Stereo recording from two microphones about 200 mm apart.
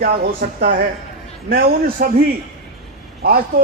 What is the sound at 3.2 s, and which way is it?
Speech, 50° right (ahead or behind).